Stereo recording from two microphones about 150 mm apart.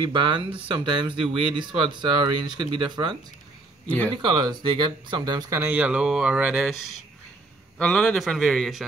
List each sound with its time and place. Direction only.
0.0 s speech: 30° right (ahead or behind)
3.8 s a man's voice: 10° left (ahead or behind)
4.1 s a man's voice: 35° right (ahead or behind); by 8.8 s centre (ahead or behind)